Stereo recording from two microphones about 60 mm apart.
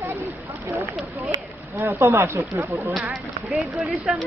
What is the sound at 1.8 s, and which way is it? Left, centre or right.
Speech, right.